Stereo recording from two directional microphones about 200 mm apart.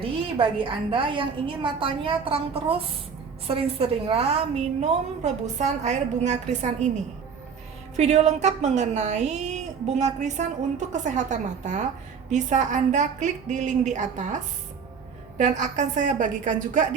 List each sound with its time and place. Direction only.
0.3 s a woman's voice: 25° right (ahead or behind)
7.9 s a woman's voice: 35° right (ahead or behind)
15.4 s a woman's voice: 35° right (ahead or behind)